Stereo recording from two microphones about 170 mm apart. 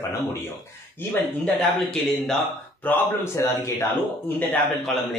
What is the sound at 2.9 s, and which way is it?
A man's voice, 15° left (ahead or behind).